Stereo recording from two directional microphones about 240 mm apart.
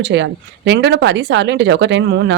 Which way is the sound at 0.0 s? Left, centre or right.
Right.